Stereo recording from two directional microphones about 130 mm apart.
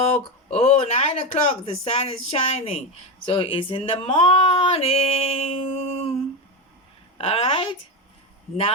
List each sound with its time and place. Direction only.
0.5 s speech: 55° left (ahead or behind)